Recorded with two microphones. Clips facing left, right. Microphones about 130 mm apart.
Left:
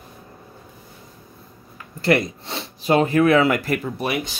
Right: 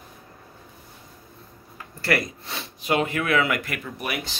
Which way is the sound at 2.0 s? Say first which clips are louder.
Left 6 dB; 25° left (ahead or behind).